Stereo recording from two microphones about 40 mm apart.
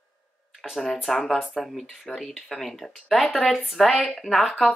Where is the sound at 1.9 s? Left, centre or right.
Centre.